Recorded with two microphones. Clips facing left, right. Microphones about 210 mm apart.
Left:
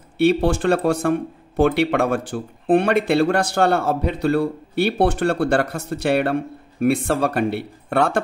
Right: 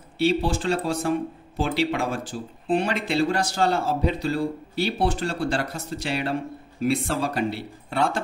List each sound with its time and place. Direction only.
0.2 s speech: 60° left (ahead or behind)